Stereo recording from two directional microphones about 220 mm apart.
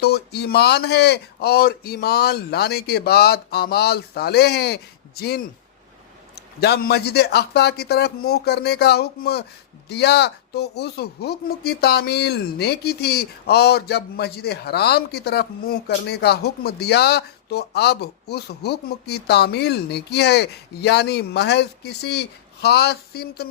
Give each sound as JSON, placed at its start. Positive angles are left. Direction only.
{"t": 0.0, "sound": "speech", "side_deg": 45}